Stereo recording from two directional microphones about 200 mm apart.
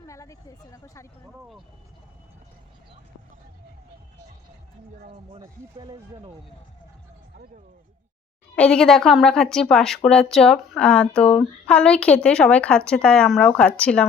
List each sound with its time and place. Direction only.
0.1 s speech: 15° left (ahead or behind)
5.4 s speech: 25° right (ahead or behind)
8.5 s a woman's voice: 5° left (ahead or behind)